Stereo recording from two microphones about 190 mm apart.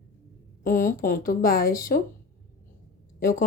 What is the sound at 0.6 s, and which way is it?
A woman's voice, 45° left (ahead or behind).